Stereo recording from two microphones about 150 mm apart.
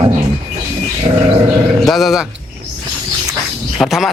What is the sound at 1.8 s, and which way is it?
Speech, centre (ahead or behind).